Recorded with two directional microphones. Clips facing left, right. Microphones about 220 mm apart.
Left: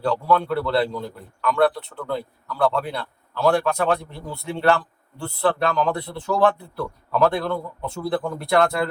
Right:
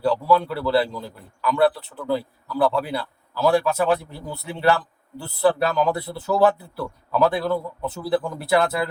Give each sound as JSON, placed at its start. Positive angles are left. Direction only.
{"t": 0.0, "sound": "a man's voice", "side_deg": -5}